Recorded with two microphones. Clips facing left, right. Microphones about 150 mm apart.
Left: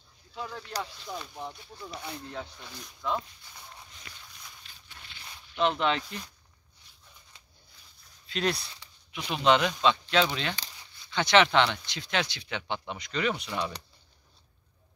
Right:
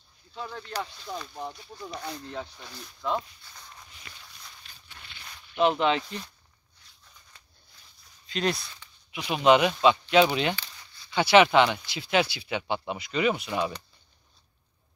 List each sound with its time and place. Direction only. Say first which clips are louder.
0.4 s speech: right 1 dB; 5° left (ahead or behind)
4.6 s walk: right 1 dB; 55° right (ahead or behind)
5.6 s speech: right 3 dB; 5° right (ahead or behind)
8.3 s speech: right 1 dB; centre (ahead or behind)